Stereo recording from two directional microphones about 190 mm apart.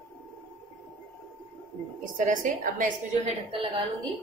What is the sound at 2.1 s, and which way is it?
A woman's voice, 45° right (ahead or behind).